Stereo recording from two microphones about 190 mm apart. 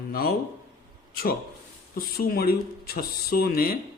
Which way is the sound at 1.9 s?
50° left (ahead or behind).